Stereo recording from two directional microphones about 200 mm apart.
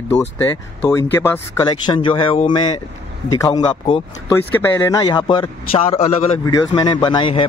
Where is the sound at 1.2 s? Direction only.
15° left (ahead or behind); by 6.3 s 30° left (ahead or behind).